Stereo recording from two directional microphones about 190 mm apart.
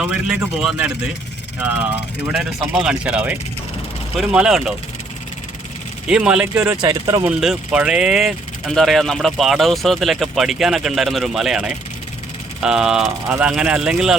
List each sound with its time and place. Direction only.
0.0 s speech: 5° right (ahead or behind)
6.1 s speech: 5° right (ahead or behind)
6.8 s speech: 20° right (ahead or behind)
7.3 s speech: 5° right (ahead or behind)